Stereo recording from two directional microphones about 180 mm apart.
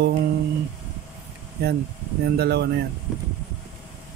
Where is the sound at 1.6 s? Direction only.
60° right (ahead or behind).